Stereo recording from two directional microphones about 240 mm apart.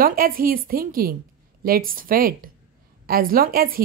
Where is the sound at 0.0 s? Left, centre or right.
Right.